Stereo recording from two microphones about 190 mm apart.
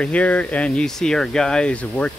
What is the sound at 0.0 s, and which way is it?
Speech, 5° left (ahead or behind).